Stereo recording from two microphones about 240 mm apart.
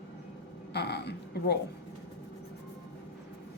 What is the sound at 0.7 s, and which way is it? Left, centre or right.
Speech, left.